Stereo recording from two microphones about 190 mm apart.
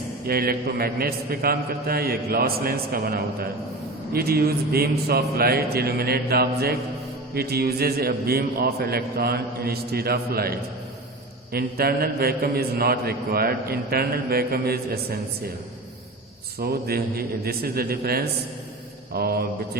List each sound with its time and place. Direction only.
0.3 s a man's voice: 55° right (ahead or behind)
11.5 s a man's voice: 55° right (ahead or behind)
16.6 s a man's voice: 55° right (ahead or behind)